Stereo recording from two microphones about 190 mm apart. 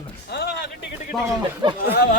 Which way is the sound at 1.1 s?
Centre (ahead or behind).